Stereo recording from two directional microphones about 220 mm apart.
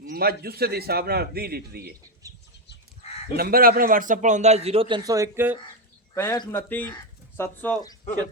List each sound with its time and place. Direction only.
0.1 s a man's voice: 45° right (ahead or behind)
2.2 s a sound: 15° right (ahead or behind)
3.3 s a man's voice: 45° right (ahead or behind); by 5.5 s 10° right (ahead or behind)
6.1 s speech: 15° left (ahead or behind)